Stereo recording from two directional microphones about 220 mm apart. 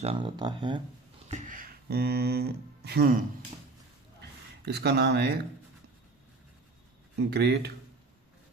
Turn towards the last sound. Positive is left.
turn(degrees=-50)  # may be behind; listen again after turning